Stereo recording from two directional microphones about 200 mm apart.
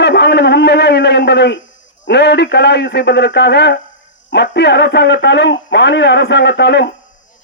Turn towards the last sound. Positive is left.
turn(degrees=60)  # may be behind; listen again after turning